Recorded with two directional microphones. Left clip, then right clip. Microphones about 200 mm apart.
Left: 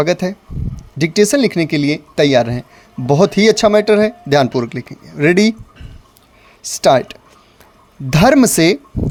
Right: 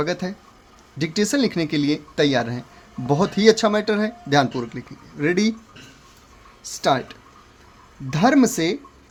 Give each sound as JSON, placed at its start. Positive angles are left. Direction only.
{"t": 0.0, "sound": "speech", "side_deg": 35}
{"t": 6.6, "sound": "speech", "side_deg": 40}